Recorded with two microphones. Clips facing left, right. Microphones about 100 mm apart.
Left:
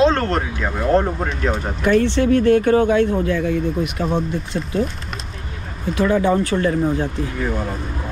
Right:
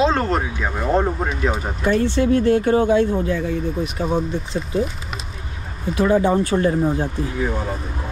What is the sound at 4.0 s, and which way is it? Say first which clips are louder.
Speech: right 2 dB; centre (ahead or behind).